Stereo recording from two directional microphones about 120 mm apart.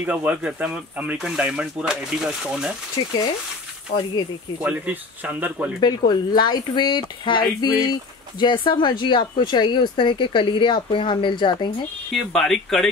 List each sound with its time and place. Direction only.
0.0 s speech: 10° right (ahead or behind)
3.9 s speech: 90° left
4.6 s speech: 15° right (ahead or behind)
5.8 s speech: 35° left (ahead or behind)
12.1 s speech: 5° left (ahead or behind)